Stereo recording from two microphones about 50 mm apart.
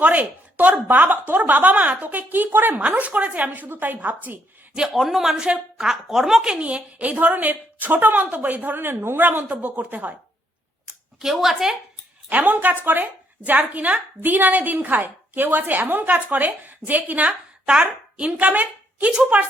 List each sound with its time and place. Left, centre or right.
0.0 s a woman's voice: right
4.9 s a man's voice: centre
6.6 s a woman's voice: right
11.2 s speech: centre
12.3 s a woman's voice: right
17.7 s a woman's voice: centre
18.3 s a woman's voice: right